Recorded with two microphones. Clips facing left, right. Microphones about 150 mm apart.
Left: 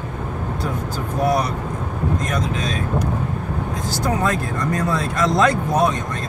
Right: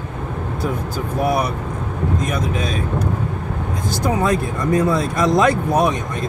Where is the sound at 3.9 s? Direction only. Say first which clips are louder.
Right 3 dB; 10° right (ahead or behind).